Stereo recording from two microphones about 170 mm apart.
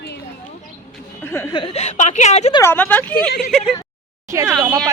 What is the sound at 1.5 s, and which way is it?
A woman's voice, 30° left (ahead or behind).